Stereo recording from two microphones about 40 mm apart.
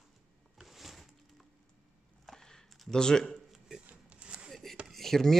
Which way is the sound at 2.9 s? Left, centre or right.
Centre.